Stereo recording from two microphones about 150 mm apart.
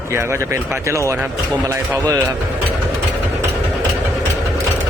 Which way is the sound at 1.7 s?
20° right (ahead or behind).